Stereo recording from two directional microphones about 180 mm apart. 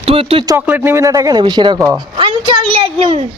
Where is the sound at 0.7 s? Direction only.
15° right (ahead or behind).